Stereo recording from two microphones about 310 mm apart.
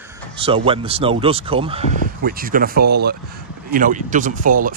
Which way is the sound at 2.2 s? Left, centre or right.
Right.